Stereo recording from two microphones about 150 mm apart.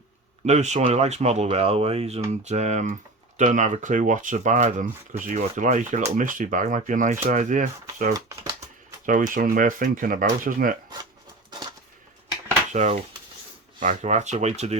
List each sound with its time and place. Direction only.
0.4 s speech: 50° right (ahead or behind); by 10.8 s 70° right (ahead or behind)
12.7 s speech: 50° right (ahead or behind)